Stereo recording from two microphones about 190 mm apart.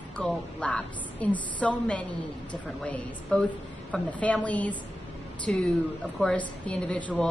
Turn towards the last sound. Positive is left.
turn(degrees=5)  # may be behind; listen again after turning